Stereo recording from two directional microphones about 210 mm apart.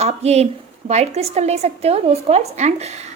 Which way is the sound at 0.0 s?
30° right (ahead or behind).